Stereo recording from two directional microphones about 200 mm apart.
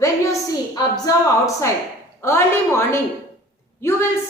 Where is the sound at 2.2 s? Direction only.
15° left (ahead or behind).